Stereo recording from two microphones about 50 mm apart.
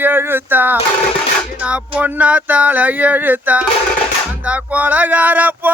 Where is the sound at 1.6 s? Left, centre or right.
Right.